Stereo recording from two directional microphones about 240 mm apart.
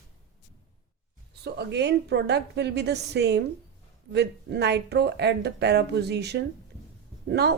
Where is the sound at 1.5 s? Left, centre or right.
Right.